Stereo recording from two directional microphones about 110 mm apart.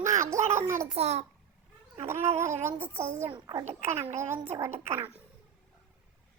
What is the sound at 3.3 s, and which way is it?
Speech, 35° right (ahead or behind).